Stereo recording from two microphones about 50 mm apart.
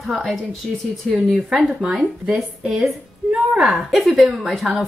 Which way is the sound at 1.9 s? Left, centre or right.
Centre.